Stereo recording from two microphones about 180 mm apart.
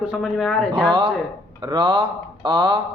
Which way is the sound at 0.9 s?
25° right (ahead or behind).